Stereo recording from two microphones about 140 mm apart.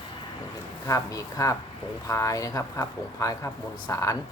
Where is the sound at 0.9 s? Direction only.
25° left (ahead or behind).